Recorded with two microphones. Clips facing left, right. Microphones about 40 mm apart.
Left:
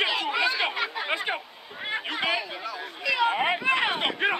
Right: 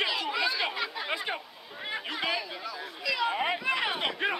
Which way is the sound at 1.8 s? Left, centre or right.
Left.